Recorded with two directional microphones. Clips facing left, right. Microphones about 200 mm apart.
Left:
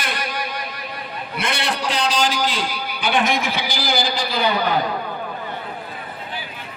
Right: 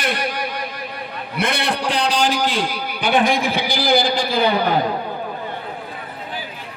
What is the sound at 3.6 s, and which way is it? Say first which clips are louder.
A man's voice: right 5 dB; 55° right (ahead or behind).